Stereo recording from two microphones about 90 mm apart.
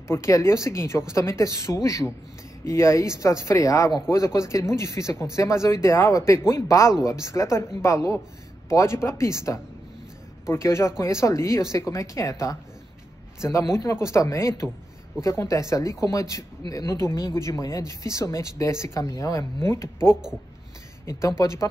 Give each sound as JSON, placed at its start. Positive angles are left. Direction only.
{"t": 0.1, "sound": "speech", "side_deg": 30}